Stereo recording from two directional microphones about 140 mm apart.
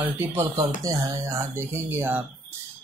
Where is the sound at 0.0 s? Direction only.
15° right (ahead or behind).